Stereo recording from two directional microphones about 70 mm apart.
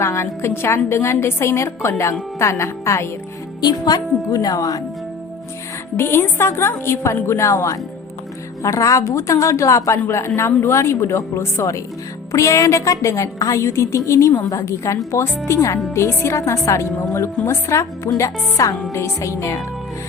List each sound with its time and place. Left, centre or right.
0.0 s a woman's voice: left
3.6 s a woman's voice: left
6.0 s a woman's voice: left